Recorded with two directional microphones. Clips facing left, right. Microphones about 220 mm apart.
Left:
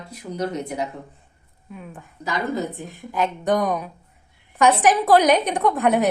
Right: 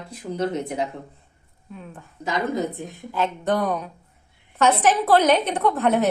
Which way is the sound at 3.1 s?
15° left (ahead or behind).